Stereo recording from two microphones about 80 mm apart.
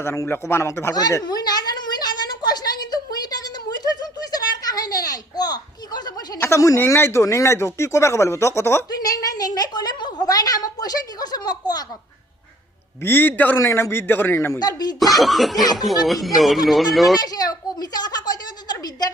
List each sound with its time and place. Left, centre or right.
0.0 s speech: left
1.2 s a sound: left
6.7 s speech: left
8.9 s a woman's voice: left
13.0 s a man's voice: left
13.6 s speech: left
14.6 s speech: left
15.2 s speech: centre
17.2 s a sound: left